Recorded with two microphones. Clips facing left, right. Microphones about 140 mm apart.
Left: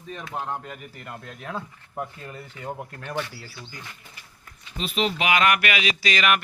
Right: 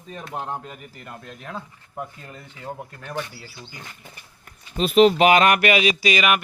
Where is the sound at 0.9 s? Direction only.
Centre (ahead or behind).